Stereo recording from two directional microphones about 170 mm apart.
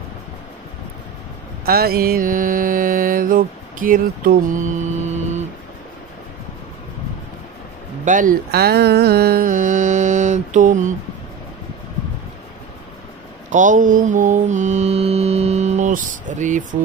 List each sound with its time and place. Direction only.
1.7 s mantra: 65° right (ahead or behind)
4.7 s music: 40° right (ahead or behind)
8.0 s mantra: 50° right (ahead or behind)
13.5 s mantra: 50° right (ahead or behind)